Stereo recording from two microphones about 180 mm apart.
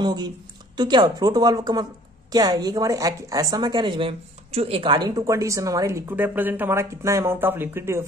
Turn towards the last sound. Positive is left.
turn(degrees=-15)  # may be behind; listen again after turning